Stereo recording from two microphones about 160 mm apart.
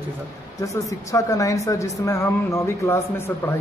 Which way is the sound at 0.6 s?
20° left (ahead or behind).